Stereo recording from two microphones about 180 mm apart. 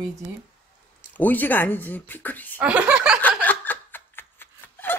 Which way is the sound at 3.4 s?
10° left (ahead or behind).